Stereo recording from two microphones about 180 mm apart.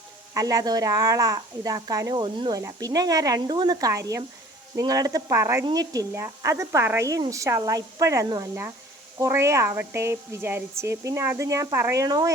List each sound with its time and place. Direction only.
0.3 s a woman's voice: 20° right (ahead or behind)